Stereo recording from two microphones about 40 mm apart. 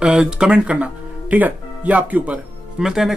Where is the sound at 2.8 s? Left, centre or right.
Centre.